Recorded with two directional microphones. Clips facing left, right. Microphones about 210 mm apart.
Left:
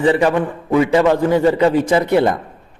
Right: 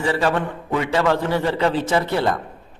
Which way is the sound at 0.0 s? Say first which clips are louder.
Left 6 dB; 20° left (ahead or behind).